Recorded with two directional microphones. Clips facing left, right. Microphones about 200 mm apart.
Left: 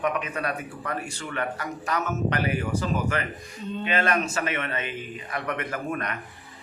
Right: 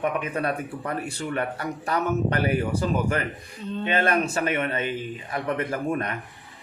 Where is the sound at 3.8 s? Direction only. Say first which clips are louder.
Right 2 dB; 30° right (ahead or behind).